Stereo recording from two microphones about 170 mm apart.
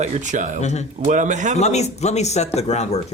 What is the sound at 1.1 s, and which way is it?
Speech, 45° right (ahead or behind).